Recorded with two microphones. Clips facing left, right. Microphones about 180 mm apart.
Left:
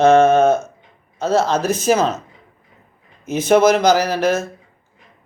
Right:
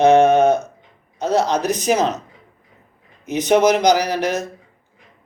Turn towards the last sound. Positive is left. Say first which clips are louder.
# left 3 dB
turn(degrees=-15)  # may be behind; listen again after turning